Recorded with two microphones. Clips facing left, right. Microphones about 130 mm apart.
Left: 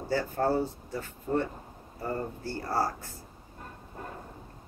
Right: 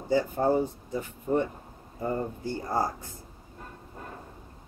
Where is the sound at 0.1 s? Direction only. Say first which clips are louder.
Right 3 dB; 15° right (ahead or behind).